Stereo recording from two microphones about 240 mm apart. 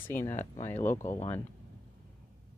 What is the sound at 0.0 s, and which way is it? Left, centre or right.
Speech, centre.